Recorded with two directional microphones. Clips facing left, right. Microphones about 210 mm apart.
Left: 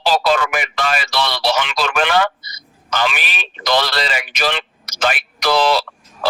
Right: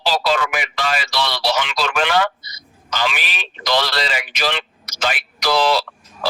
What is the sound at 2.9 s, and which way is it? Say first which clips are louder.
Speech: left 3 dB; 50° left (ahead or behind).